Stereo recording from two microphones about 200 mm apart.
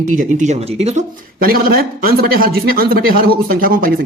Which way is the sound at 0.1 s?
40° right (ahead or behind).